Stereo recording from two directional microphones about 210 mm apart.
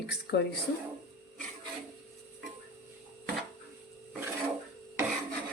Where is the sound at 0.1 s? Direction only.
50° left (ahead or behind).